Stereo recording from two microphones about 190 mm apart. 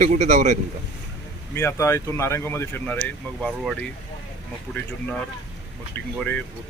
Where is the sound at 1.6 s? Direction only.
15° left (ahead or behind).